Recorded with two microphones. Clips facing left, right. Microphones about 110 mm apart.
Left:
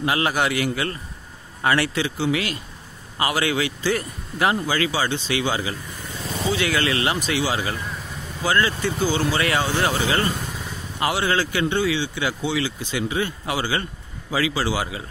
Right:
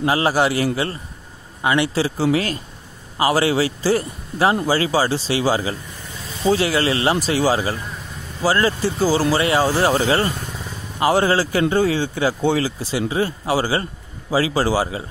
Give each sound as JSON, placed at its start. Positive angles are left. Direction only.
{"t": 0.0, "sound": "speech", "side_deg": -30}
{"t": 1.6, "sound": "speech", "side_deg": -20}
{"t": 2.0, "sound": "speech", "side_deg": -35}